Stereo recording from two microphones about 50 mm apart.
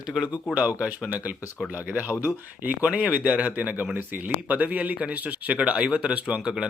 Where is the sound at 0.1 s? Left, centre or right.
Centre.